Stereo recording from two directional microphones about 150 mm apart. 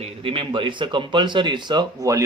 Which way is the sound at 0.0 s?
35° right (ahead or behind).